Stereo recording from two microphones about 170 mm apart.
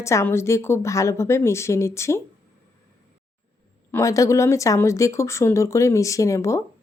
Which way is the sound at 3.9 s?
15° left (ahead or behind).